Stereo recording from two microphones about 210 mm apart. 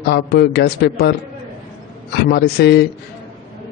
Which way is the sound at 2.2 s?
50° left (ahead or behind).